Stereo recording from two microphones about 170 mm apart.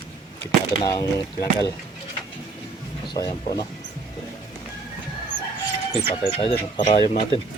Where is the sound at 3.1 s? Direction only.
25° left (ahead or behind).